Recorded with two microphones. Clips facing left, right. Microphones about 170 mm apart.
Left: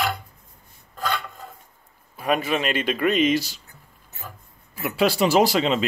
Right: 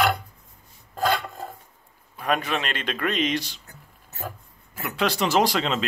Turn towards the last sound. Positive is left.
turn(degrees=5)  # may be behind; listen again after turning